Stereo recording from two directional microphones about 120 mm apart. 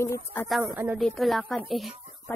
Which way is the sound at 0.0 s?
20° left (ahead or behind).